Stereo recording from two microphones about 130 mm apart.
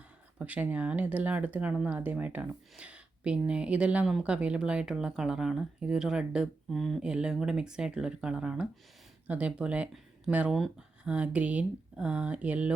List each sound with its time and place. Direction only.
0.3 s speech: 10° right (ahead or behind)